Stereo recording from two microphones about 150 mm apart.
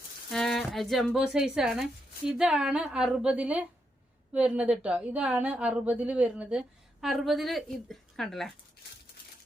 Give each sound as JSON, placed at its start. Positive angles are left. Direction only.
{"t": 0.3, "sound": "a woman's voice", "side_deg": 0}